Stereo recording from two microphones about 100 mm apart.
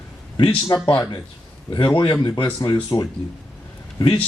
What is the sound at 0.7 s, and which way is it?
Speech, 45° left (ahead or behind).